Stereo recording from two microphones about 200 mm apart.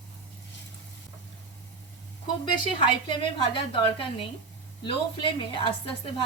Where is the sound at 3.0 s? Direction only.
25° left (ahead or behind).